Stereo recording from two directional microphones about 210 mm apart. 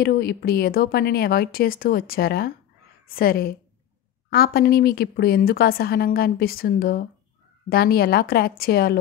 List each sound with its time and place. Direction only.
0.0 s a woman's voice: 50° left (ahead or behind)